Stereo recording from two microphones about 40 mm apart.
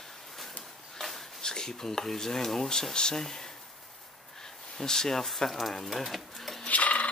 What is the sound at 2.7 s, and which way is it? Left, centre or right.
Speech, centre.